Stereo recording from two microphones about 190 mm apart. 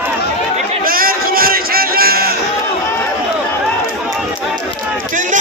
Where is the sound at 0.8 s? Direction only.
50° right (ahead or behind).